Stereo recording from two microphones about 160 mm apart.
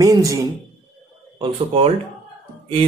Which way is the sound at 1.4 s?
35° right (ahead or behind).